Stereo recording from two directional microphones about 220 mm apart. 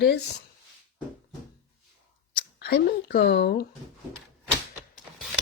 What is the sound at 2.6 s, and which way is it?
Speech, 45° left (ahead or behind).